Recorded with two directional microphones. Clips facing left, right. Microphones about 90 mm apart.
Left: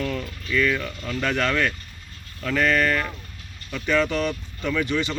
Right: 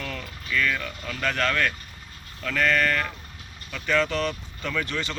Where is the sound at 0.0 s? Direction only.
Centre (ahead or behind).